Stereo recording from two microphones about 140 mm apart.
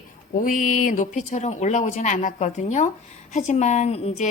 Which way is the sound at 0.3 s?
70° left (ahead or behind).